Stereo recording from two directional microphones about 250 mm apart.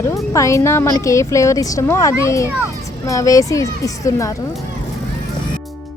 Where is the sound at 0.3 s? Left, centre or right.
Centre.